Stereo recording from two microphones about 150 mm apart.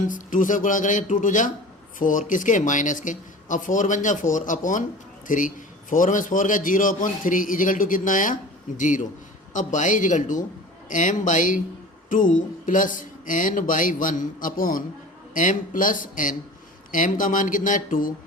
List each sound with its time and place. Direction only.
0.0 s speech: 60° left (ahead or behind)